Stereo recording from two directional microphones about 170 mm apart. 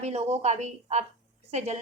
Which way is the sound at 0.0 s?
40° right (ahead or behind).